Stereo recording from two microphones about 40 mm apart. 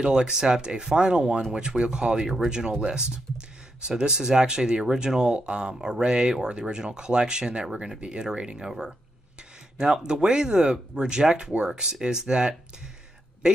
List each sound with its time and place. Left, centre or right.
0.0 s speech: centre
10.0 s speech: right